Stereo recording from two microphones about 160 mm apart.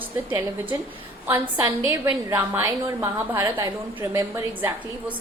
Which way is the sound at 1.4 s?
30° right (ahead or behind).